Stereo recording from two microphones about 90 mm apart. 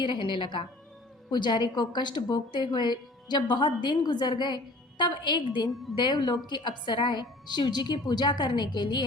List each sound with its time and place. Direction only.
0.0 s a woman's voice: 60° left (ahead or behind)